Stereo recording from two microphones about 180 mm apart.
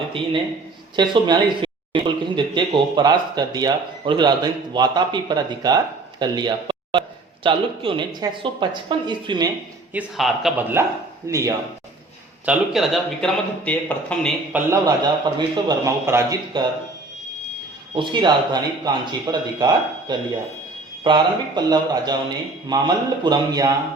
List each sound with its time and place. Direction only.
0.9 s speech: 25° right (ahead or behind)
9.9 s speech: 5° right (ahead or behind)
12.5 s speech: centre (ahead or behind)
14.5 s speech: 20° right (ahead or behind)
17.9 s speech: 25° right (ahead or behind)